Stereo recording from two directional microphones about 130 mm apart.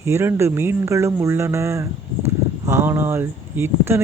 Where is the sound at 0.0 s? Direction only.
20° right (ahead or behind).